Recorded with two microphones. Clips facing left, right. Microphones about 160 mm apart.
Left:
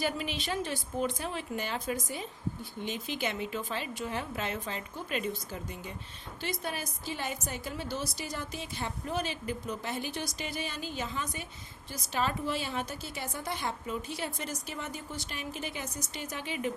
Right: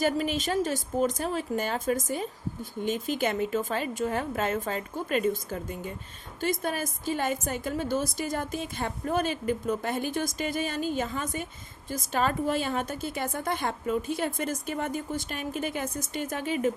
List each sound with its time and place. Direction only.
0.0 s a woman's voice: 45° right (ahead or behind)